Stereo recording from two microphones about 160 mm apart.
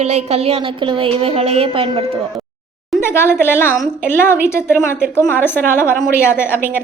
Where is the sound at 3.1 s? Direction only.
15° left (ahead or behind).